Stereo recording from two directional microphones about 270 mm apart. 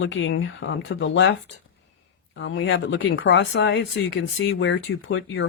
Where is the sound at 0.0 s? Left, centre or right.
Left.